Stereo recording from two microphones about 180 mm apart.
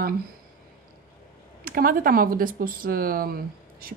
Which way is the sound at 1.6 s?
55° right (ahead or behind).